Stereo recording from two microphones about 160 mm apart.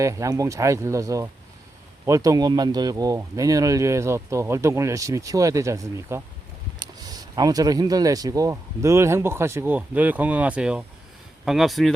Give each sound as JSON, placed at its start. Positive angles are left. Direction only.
{"t": 0.0, "sound": "speech", "side_deg": -20}